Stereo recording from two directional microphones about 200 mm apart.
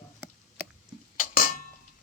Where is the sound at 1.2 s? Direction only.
40° left (ahead or behind).